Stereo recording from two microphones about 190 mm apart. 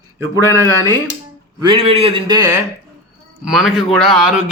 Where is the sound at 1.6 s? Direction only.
25° right (ahead or behind).